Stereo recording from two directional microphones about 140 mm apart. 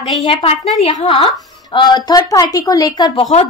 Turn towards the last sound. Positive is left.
turn(degrees=30)  # may be behind; listen again after turning